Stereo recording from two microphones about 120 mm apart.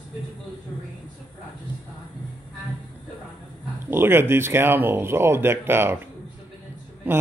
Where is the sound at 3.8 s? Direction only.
20° right (ahead or behind).